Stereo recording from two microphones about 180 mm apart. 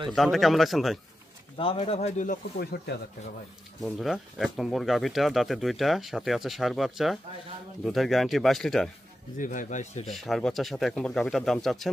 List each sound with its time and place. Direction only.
0.1 s speech: centre (ahead or behind)
1.6 s speech: 30° left (ahead or behind)
2.6 s speech: 60° left (ahead or behind)
3.8 s speech: centre (ahead or behind)
9.4 s speech: 45° left (ahead or behind)
10.0 s speech: centre (ahead or behind)